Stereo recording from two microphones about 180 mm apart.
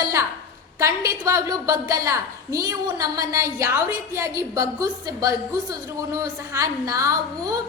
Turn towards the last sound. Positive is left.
turn(degrees=-20)  # may be behind; listen again after turning